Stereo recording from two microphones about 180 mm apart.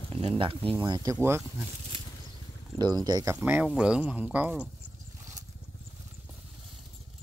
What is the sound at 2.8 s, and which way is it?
Speech, 20° right (ahead or behind).